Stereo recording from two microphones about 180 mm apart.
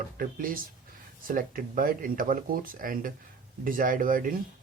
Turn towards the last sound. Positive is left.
turn(degrees=-50)  # may be behind; listen again after turning